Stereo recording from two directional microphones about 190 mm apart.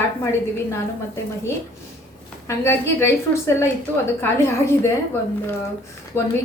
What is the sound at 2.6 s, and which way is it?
A woman's voice, 15° left (ahead or behind).